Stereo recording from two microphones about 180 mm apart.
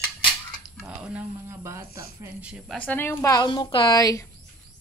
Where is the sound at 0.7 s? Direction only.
5° right (ahead or behind).